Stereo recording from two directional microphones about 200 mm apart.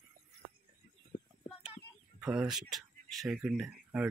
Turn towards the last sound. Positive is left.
turn(degrees=-5)  # may be behind; listen again after turning